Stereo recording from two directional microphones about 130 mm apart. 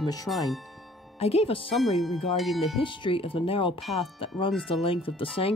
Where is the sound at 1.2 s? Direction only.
50° left (ahead or behind).